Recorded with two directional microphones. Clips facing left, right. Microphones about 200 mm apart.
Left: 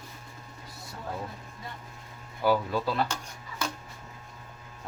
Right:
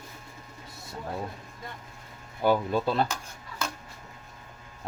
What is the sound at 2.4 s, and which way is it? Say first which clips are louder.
Speech: right 2 dB; 25° right (ahead or behind).